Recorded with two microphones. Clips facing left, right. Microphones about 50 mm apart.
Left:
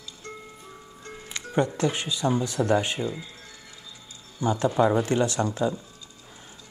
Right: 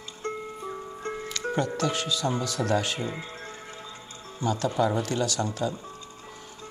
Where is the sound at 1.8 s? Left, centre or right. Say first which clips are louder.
Left 1 dB; left.